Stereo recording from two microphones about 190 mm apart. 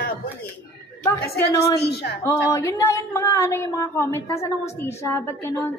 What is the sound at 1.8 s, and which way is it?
Speech, 60° left (ahead or behind).